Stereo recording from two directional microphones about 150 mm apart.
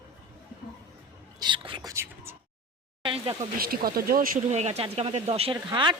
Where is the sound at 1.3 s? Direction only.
30° right (ahead or behind); by 2.4 s 15° right (ahead or behind).